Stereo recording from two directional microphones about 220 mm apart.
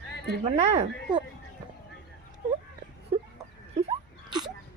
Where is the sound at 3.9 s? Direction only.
20° right (ahead or behind).